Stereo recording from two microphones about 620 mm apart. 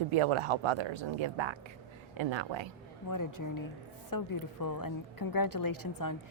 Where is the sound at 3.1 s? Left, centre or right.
Left.